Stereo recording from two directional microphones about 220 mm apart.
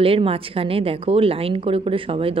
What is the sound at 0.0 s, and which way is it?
A woman's voice, 25° right (ahead or behind).